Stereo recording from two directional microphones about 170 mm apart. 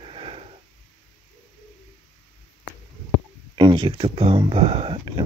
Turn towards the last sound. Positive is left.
turn(degrees=-30)  # may be behind; listen again after turning